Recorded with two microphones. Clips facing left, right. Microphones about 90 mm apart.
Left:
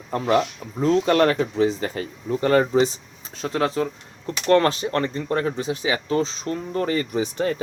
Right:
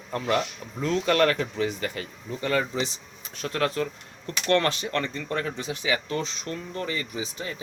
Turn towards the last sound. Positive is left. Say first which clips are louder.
# left 10 dB
turn(degrees=60)  # may be behind; listen again after turning